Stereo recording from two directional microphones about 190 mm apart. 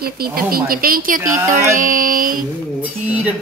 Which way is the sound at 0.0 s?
50° right (ahead or behind).